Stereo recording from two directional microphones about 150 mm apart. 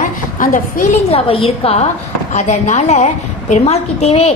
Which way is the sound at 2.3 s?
50° left (ahead or behind).